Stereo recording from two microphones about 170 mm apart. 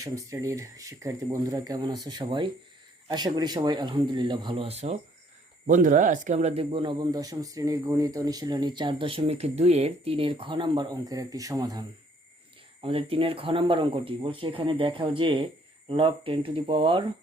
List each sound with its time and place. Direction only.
0.0 s speech: 20° right (ahead or behind)
4.5 s speech: 40° right (ahead or behind)
5.6 s speech: 50° right (ahead or behind); by 11.9 s 20° right (ahead or behind)
12.8 s speech: 35° right (ahead or behind)